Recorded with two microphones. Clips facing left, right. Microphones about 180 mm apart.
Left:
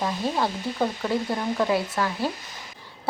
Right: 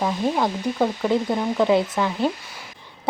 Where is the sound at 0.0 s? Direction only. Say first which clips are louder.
Right 4 dB; 10° right (ahead or behind).